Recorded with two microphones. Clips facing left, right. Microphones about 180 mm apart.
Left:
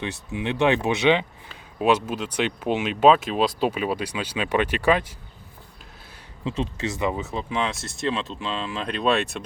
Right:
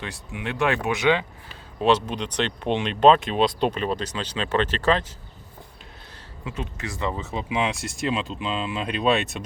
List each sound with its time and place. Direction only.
0.0 s speech: 25° left (ahead or behind)
1.8 s speech: 10° left (ahead or behind)
6.4 s speech: 30° left (ahead or behind)
7.2 s speech: centre (ahead or behind)
7.5 s speech: 15° right (ahead or behind)